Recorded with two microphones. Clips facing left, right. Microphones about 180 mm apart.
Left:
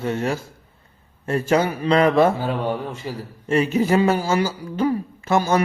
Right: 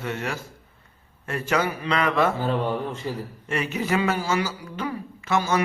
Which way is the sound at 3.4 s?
30° left (ahead or behind).